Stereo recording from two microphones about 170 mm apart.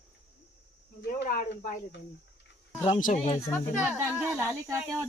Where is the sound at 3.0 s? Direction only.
45° left (ahead or behind).